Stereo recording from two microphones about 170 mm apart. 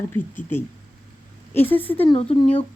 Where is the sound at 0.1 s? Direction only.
15° left (ahead or behind).